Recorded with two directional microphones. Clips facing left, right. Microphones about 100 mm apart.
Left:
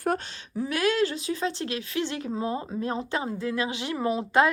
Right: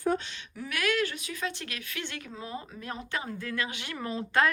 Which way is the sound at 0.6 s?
30° left (ahead or behind).